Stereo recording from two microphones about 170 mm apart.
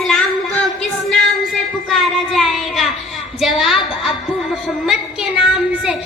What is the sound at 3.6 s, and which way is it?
Speech, centre (ahead or behind).